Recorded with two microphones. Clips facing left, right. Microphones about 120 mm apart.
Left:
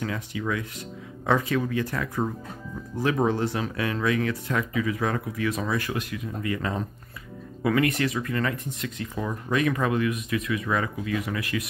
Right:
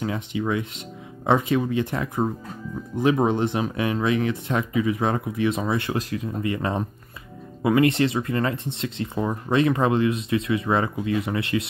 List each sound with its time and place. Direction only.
0.0 s speech: 25° right (ahead or behind)